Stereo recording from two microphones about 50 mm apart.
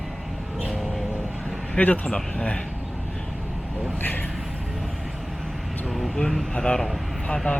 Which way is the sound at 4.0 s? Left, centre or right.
Left.